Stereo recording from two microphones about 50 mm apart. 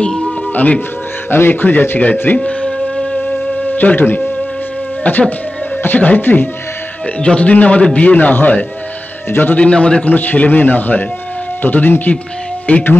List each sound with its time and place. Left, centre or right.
0.0 s music: centre
0.5 s speech: left
1.3 s a man's voice: left
2.3 s speech: left
3.7 s a man's voice: left
7.2 s a man's voice: left
9.6 s a man's voice: left
10.0 s a man's voice: left